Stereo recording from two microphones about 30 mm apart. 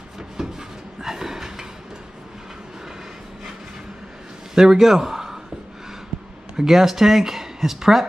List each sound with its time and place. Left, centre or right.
0.4 s a sound: centre
4.6 s a man's voice: centre
6.5 s speech: centre